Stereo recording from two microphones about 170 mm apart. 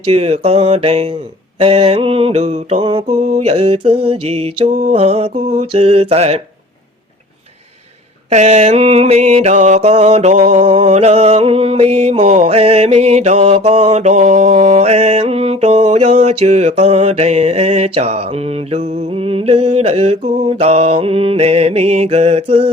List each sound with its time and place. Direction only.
0.0 s mantra: 35° right (ahead or behind)
8.3 s mantra: 45° right (ahead or behind)